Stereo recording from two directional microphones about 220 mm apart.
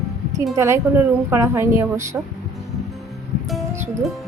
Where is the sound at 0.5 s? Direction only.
15° right (ahead or behind).